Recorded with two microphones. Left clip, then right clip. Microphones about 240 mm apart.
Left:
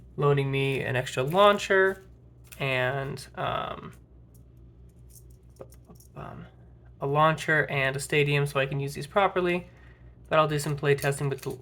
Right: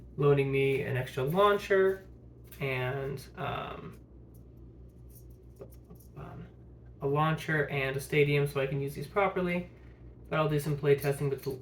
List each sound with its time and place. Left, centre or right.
0.2 s speech: left
7.0 s speech: left